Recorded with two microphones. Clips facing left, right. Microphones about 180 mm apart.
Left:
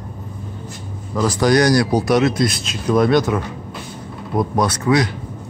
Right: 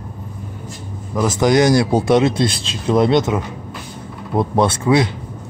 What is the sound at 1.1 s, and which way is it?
Speech, 20° right (ahead or behind).